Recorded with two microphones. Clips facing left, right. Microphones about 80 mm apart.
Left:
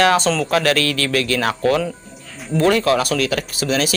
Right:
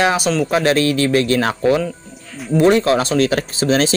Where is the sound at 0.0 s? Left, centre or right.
Centre.